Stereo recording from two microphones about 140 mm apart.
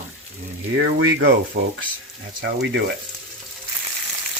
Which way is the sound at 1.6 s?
80° right.